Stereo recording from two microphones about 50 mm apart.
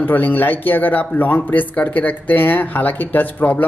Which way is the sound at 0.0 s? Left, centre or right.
Left.